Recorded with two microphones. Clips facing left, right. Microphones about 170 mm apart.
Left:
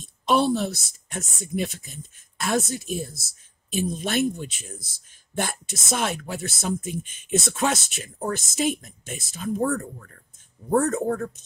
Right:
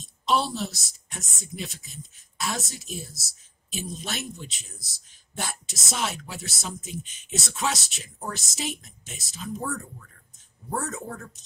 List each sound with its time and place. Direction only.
0.0 s speech: 55° left (ahead or behind)